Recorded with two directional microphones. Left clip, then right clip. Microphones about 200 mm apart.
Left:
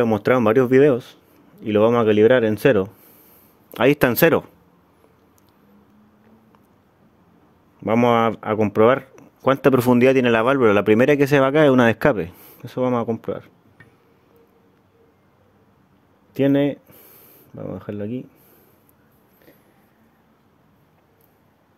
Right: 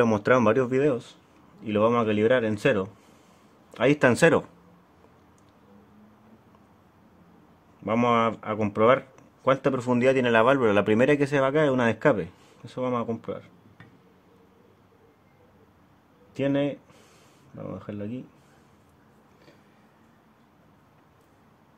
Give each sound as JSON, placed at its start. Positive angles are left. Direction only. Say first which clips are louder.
{"t": 0.0, "sound": "speech", "louder": "left 3 dB", "side_deg": 20}
{"t": 0.6, "sound": "a man's voice", "louder": "left 9 dB", "side_deg": 40}
{"t": 3.7, "sound": "a man's voice", "louder": "left 4 dB", "side_deg": 55}
{"t": 4.1, "sound": "speech", "louder": "left 4 dB", "side_deg": 30}
{"t": 7.8, "sound": "speech", "louder": "left 6 dB", "side_deg": 40}
{"t": 16.3, "sound": "a sound", "louder": "left 7 dB", "side_deg": 40}
{"t": 17.6, "sound": "a man's voice", "louder": "left 6 dB", "side_deg": 45}